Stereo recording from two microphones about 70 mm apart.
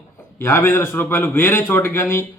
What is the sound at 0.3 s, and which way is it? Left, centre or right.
A man's voice, left.